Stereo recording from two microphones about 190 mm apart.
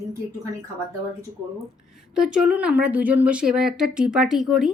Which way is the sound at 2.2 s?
5° right (ahead or behind).